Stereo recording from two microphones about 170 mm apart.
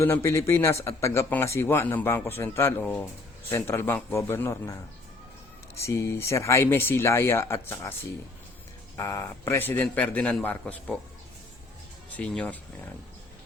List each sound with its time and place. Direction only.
0.0 s speech: 15° left (ahead or behind)
5.8 s speech: 15° left (ahead or behind)
9.0 s speech: 15° left (ahead or behind)
12.1 s speech: 5° left (ahead or behind)